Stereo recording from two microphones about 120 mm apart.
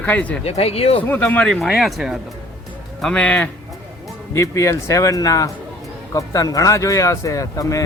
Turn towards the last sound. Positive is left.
turn(degrees=30)  # may be behind; listen again after turning